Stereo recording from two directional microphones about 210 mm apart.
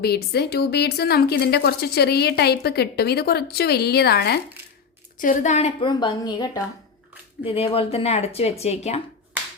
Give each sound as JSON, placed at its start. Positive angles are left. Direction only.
{"t": 0.0, "sound": "speech", "side_deg": 50}
{"t": 5.2, "sound": "speech", "side_deg": 35}